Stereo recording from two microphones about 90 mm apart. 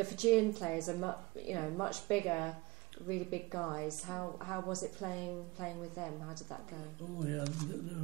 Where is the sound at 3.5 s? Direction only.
20° left (ahead or behind).